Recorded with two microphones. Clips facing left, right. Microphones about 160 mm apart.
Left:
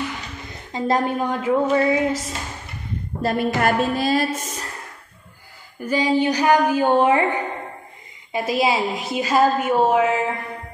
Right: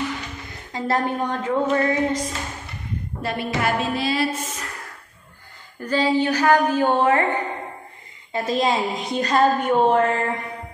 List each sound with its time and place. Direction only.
0.7 s a woman's voice: 20° left (ahead or behind)
3.2 s a woman's voice: 45° left (ahead or behind)
5.8 s a woman's voice: 10° left (ahead or behind)
8.3 s a woman's voice: 10° left (ahead or behind)